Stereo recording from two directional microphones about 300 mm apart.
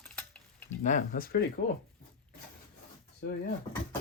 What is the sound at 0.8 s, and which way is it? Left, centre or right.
Speech, left.